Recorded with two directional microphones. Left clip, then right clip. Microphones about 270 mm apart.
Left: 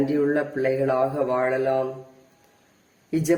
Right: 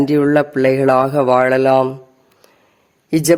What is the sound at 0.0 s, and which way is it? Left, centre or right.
Speech, right.